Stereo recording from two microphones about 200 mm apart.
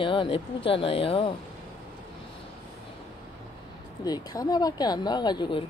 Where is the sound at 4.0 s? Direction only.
20° left (ahead or behind).